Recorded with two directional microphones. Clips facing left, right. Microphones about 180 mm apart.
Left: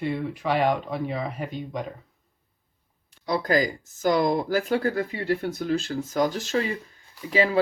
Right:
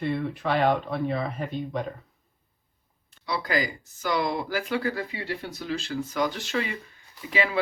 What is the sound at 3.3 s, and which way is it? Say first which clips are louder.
Speech: left 5 dB; 45° left (ahead or behind).